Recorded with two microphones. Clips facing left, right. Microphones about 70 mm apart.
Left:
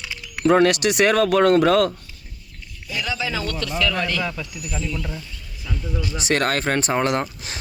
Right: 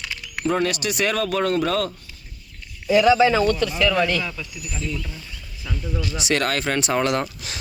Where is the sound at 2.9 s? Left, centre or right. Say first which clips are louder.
Right 12 dB; right.